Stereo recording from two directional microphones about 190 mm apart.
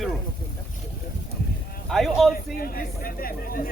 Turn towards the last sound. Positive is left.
turn(degrees=50)  # may be behind; listen again after turning